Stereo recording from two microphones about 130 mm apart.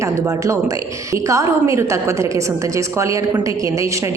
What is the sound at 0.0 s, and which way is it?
A woman's voice, 25° right (ahead or behind).